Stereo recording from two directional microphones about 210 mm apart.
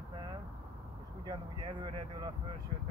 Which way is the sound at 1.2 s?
20° right (ahead or behind).